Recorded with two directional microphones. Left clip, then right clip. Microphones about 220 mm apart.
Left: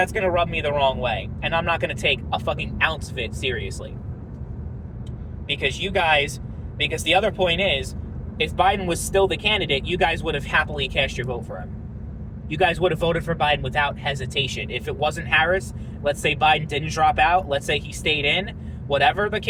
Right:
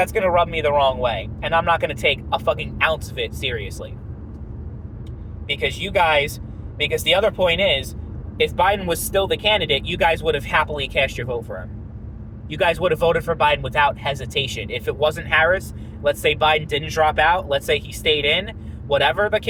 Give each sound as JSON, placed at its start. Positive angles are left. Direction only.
{"t": 0.0, "sound": "speech", "side_deg": -25}
{"t": 5.5, "sound": "speech", "side_deg": -25}
{"t": 12.5, "sound": "speech", "side_deg": -25}